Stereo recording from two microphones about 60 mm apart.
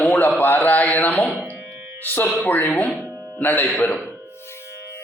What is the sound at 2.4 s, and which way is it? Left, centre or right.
A man's voice, left.